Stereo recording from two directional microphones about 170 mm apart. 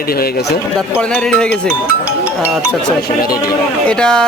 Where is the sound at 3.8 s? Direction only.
5° left (ahead or behind).